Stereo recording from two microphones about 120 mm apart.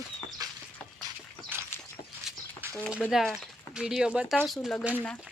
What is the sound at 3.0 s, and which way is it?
Speech, centre (ahead or behind).